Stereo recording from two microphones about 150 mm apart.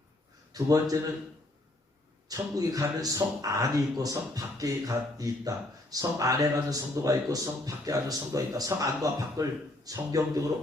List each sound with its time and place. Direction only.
0.5 s speech: 25° right (ahead or behind)
2.3 s speech: 25° right (ahead or behind)